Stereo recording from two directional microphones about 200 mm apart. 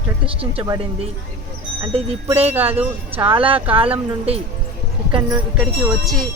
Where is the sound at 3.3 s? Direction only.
25° right (ahead or behind).